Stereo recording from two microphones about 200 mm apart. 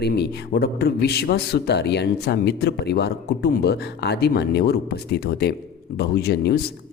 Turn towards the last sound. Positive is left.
turn(degrees=55)  # may be behind; listen again after turning